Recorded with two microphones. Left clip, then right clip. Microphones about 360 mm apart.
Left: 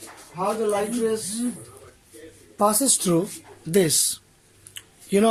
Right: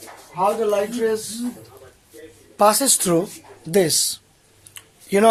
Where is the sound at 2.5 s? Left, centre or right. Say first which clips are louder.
Right 5 dB; right.